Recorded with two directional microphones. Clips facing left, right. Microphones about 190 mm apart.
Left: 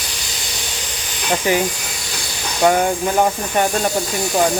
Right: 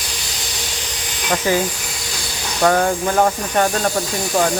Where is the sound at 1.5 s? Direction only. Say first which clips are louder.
Left 1 dB; 20° left (ahead or behind).